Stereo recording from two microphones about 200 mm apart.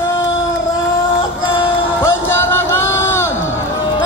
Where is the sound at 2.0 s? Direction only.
10° left (ahead or behind).